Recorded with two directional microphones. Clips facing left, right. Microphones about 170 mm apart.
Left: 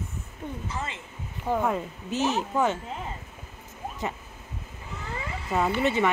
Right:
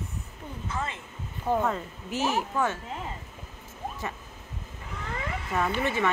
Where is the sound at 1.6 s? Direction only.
15° left (ahead or behind).